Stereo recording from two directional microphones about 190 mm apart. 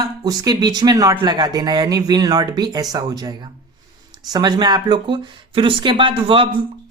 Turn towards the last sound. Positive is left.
turn(degrees=-25)  # may be behind; listen again after turning